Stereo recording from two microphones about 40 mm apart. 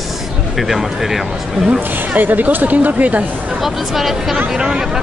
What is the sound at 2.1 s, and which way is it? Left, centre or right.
Speech, right.